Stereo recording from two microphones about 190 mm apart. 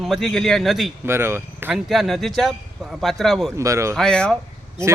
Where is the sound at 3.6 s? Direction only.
15° right (ahead or behind).